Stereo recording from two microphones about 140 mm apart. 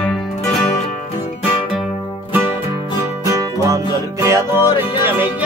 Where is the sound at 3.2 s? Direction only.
20° right (ahead or behind).